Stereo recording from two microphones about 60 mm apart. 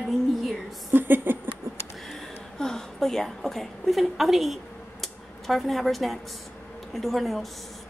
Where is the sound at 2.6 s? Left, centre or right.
Centre.